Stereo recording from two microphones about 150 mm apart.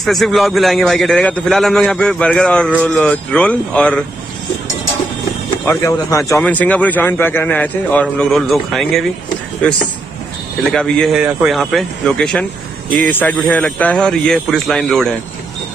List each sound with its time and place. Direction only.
0.0 s a man's voice: centre (ahead or behind)
5.7 s a man's voice: 20° left (ahead or behind)
6.4 s a man's voice: 10° left (ahead or behind)
10.7 s a man's voice: 5° left (ahead or behind)